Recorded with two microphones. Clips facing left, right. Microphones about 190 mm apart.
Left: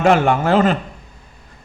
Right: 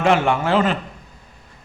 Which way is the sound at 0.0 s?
45° left (ahead or behind).